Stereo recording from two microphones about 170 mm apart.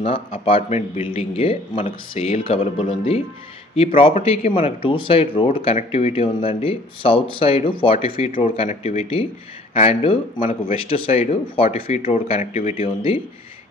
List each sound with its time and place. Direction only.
0.0 s speech: 35° left (ahead or behind)